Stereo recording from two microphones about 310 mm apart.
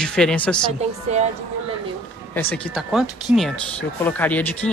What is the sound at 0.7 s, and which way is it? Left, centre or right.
Speech, right.